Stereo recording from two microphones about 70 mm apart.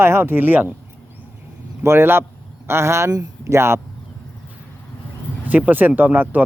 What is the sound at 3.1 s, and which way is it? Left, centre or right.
Speech, right.